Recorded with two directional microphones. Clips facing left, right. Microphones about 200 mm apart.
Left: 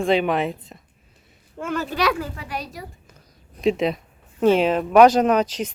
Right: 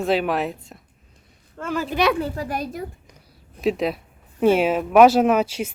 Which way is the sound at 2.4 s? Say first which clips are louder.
Right 5 dB; 50° right (ahead or behind).